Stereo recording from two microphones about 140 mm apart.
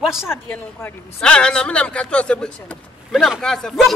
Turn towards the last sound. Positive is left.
turn(degrees=0)  # may be behind; listen again after turning